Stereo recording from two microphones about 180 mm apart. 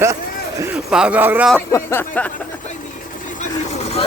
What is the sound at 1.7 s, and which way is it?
Speech, 15° left (ahead or behind).